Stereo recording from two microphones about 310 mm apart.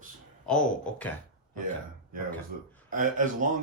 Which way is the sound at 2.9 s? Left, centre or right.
Right.